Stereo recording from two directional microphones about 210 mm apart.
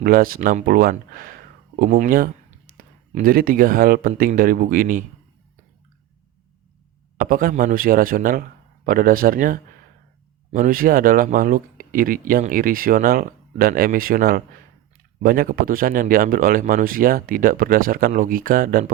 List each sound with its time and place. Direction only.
0.0 s speech: 45° right (ahead or behind)
7.2 s speech: 40° right (ahead or behind)